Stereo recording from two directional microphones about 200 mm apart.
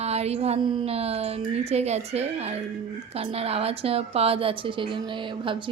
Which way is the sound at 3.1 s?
30° right (ahead or behind).